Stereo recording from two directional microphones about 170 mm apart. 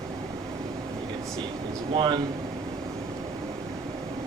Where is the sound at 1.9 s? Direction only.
25° right (ahead or behind).